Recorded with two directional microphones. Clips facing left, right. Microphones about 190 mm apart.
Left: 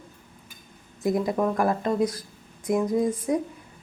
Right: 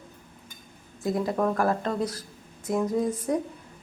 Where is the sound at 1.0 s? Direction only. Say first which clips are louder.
Left 2 dB; 15° left (ahead or behind).